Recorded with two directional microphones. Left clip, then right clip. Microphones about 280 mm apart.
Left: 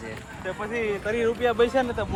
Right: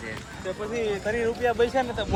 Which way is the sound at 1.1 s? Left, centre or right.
Left.